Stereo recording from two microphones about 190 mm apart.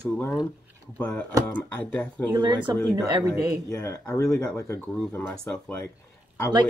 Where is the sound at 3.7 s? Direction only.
15° left (ahead or behind).